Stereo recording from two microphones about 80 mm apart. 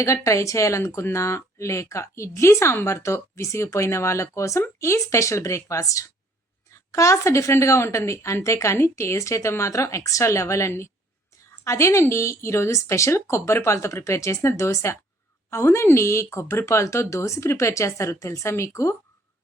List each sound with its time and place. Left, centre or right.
0.0 s speech: left